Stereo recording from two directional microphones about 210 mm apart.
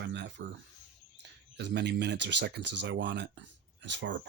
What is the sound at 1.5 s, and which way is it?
Speech, 55° right (ahead or behind).